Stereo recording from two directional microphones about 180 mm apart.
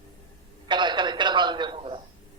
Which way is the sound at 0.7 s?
25° right (ahead or behind).